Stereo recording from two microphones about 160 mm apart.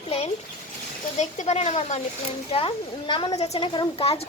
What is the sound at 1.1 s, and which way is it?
A woman's voice, 45° left (ahead or behind).